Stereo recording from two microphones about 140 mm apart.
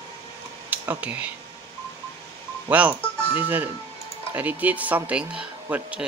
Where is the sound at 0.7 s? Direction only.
15° right (ahead or behind).